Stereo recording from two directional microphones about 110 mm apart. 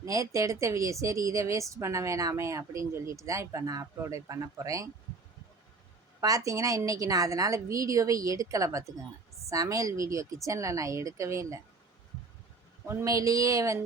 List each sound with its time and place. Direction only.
0.0 s a woman's voice: 30° right (ahead or behind)
6.1 s a woman's voice: 30° right (ahead or behind)
12.9 s a woman's voice: 25° right (ahead or behind)